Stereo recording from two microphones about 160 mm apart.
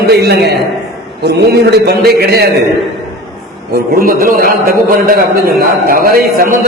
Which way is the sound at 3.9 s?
65° right (ahead or behind).